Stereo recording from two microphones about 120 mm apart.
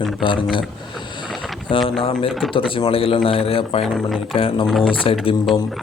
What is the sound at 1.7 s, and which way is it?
A man's voice, 45° left (ahead or behind).